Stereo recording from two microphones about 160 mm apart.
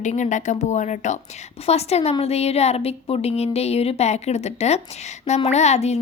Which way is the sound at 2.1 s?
40° left (ahead or behind).